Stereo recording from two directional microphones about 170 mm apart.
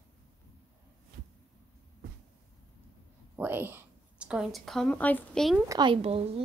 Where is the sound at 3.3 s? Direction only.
10° right (ahead or behind).